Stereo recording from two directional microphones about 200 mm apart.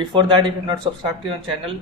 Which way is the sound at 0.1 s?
25° right (ahead or behind).